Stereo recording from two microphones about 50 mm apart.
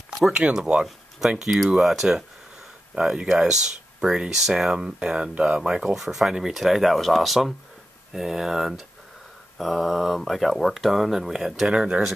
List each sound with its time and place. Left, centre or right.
0.3 s speech: centre
11.6 s speech: centre